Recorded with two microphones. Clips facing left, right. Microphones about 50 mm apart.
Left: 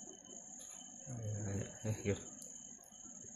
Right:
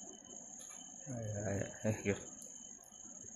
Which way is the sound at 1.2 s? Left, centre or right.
Right.